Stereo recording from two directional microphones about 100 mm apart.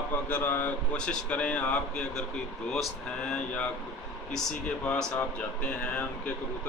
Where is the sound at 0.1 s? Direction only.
20° left (ahead or behind).